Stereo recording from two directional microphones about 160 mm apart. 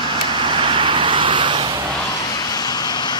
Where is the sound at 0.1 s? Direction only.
30° right (ahead or behind).